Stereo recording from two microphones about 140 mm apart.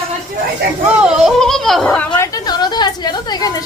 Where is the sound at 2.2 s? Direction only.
25° left (ahead or behind).